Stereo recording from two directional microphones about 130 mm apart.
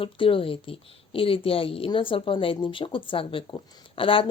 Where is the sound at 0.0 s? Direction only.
45° left (ahead or behind).